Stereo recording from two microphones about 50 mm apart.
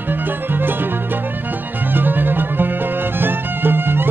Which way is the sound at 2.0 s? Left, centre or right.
Right.